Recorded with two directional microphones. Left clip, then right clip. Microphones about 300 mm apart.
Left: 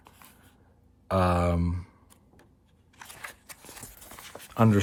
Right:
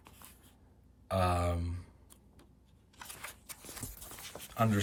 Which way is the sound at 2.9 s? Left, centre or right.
Centre.